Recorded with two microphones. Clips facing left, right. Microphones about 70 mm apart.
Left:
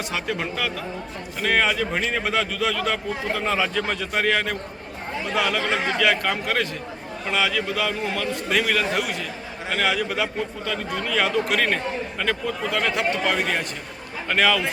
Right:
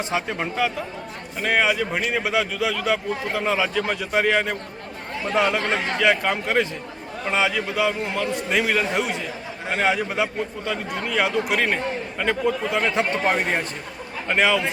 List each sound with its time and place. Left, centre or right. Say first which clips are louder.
0.1 s a man's voice: right 2 dB; centre
5.6 s speech: even; centre
6.0 s a man's voice: right 4 dB; centre
14.3 s a man's voice: right 1 dB; centre